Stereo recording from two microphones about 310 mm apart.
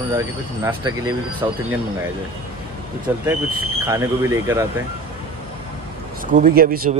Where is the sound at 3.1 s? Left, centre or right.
Centre.